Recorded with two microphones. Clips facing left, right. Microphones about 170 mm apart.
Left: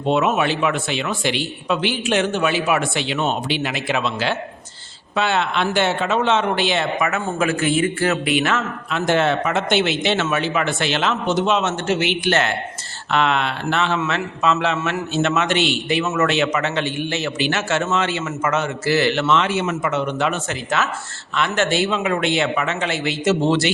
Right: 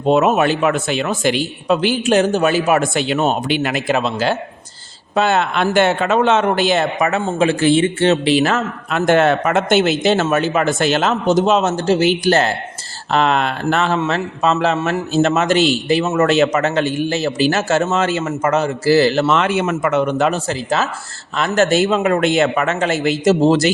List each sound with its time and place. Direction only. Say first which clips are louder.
0.0 s a man's voice: right 5 dB; 40° right (ahead or behind)
8.9 s a man's voice: right 5 dB; 50° right (ahead or behind); by 19.4 s 35° right (ahead or behind)
19.4 s speech: right 4 dB; 55° right (ahead or behind)